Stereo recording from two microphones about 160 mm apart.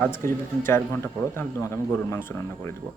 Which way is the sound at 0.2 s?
15° left (ahead or behind).